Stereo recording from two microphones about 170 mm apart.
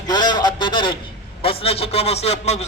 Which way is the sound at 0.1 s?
25° left (ahead or behind).